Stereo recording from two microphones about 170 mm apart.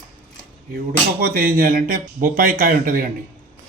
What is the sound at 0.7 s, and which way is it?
Speech, 60° right (ahead or behind).